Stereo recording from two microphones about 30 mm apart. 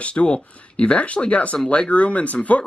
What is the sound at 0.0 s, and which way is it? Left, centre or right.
Speech, left.